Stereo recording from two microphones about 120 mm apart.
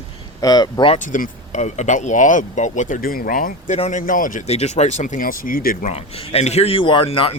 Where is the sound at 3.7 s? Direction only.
75° left (ahead or behind).